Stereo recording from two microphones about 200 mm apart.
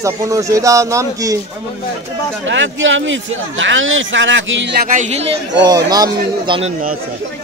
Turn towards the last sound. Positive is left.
turn(degrees=-25)  # may be behind; listen again after turning